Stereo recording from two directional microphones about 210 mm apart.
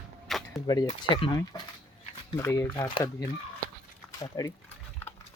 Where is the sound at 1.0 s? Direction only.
25° left (ahead or behind).